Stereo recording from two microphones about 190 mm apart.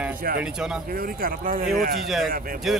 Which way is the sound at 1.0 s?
50° right (ahead or behind).